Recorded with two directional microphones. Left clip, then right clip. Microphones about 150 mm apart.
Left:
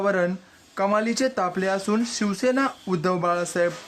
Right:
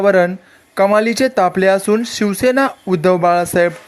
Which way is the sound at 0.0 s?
30° right (ahead or behind).